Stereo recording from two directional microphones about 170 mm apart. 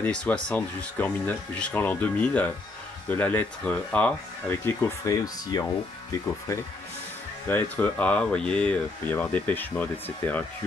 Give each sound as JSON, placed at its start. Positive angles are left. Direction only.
{"t": 0.0, "sound": "speech", "side_deg": 5}